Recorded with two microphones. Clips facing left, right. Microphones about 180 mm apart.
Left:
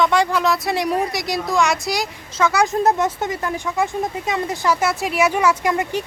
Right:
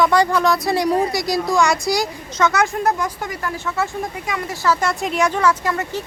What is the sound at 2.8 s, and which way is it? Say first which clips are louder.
Speech: left 3 dB; 25° left (ahead or behind).